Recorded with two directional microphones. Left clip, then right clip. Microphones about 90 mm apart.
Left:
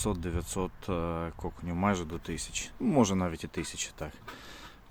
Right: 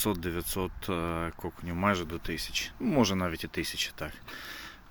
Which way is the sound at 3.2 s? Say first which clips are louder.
Right 2 dB; 30° left (ahead or behind).